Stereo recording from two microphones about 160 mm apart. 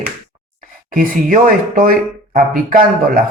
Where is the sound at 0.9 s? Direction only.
60° right (ahead or behind).